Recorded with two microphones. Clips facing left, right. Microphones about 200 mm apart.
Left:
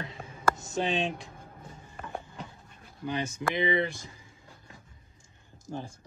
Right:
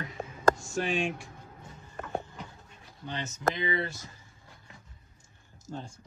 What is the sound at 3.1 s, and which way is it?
Speech, 10° left (ahead or behind).